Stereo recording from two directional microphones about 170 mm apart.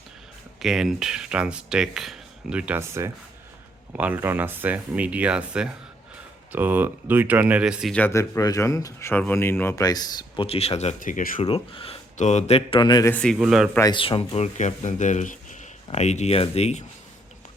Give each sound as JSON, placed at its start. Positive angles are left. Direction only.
{"t": 0.6, "sound": "speech", "side_deg": 0}
{"t": 7.9, "sound": "speech", "side_deg": 15}
{"t": 11.4, "sound": "speech", "side_deg": 30}
{"t": 13.1, "sound": "a man's voice", "side_deg": 5}
{"t": 13.4, "sound": "speech", "side_deg": -5}
{"t": 13.9, "sound": "speech", "side_deg": 30}